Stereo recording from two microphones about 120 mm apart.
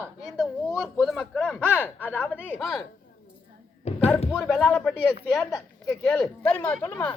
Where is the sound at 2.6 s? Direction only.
Centre (ahead or behind).